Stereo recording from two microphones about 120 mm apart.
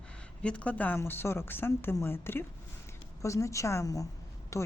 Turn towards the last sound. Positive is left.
turn(degrees=25)  # may be behind; listen again after turning